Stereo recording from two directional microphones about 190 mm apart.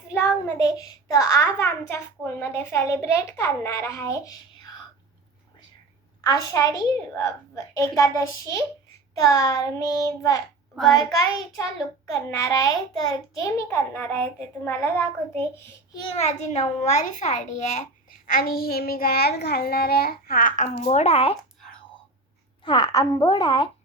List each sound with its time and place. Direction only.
0.1 s a child's voice: 15° left (ahead or behind)
6.2 s a child's voice: 20° left (ahead or behind)
12.1 s a child's voice: 15° left (ahead or behind)
16.1 s a child's voice: 35° left (ahead or behind)
18.3 s a child's voice: 50° left (ahead or behind); by 21.3 s 30° left (ahead or behind)
22.6 s a woman's voice: 25° left (ahead or behind)